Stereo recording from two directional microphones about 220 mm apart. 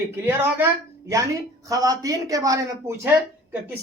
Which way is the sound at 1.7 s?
15° right (ahead or behind).